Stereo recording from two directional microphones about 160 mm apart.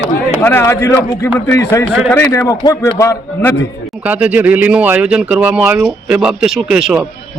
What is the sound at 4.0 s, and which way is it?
A man's voice, 10° right (ahead or behind).